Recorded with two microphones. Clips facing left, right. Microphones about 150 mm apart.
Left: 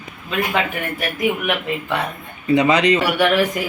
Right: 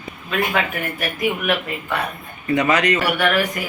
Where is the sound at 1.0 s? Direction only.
20° left (ahead or behind).